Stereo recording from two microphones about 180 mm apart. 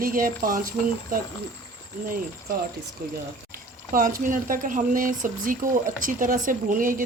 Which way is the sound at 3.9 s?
45° right (ahead or behind).